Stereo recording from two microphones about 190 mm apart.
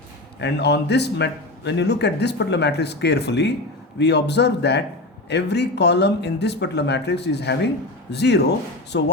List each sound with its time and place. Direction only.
0.3 s speech: 65° left (ahead or behind)